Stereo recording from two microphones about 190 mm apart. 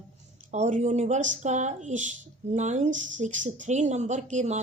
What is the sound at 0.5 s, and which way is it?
Speech, 40° right (ahead or behind).